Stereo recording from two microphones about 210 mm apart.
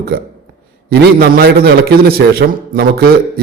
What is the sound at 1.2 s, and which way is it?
A man's voice, 50° right (ahead or behind).